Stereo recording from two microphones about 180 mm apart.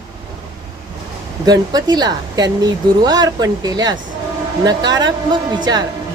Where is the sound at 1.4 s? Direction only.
20° right (ahead or behind).